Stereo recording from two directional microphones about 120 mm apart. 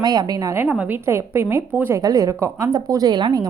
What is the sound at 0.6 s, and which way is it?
A woman's voice, 15° right (ahead or behind).